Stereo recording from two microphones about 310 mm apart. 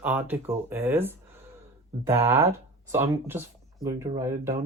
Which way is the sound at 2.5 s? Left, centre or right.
Centre.